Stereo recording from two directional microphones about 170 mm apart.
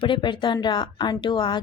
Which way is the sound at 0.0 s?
30° left (ahead or behind).